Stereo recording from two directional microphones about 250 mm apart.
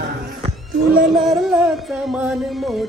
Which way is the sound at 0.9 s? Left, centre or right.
Right.